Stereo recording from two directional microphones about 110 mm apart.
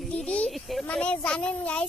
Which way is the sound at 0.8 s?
10° left (ahead or behind).